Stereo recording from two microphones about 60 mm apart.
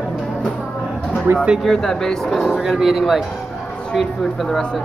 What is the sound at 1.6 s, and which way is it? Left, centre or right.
Speech, centre.